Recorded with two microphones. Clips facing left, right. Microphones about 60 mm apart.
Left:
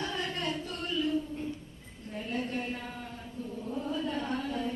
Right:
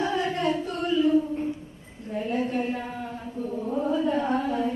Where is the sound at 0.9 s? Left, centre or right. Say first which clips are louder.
Right 10 dB; right.